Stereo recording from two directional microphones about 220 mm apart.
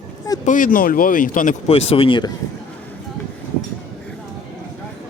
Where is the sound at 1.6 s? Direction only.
25° left (ahead or behind).